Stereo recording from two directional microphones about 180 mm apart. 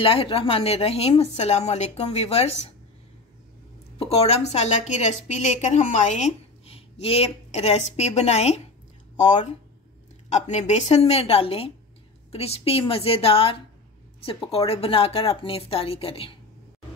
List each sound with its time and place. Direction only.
0.0 s a woman's voice: 30° left (ahead or behind)
4.0 s a woman's voice: 35° left (ahead or behind)